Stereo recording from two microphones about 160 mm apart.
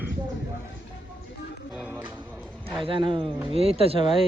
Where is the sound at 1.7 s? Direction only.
10° right (ahead or behind).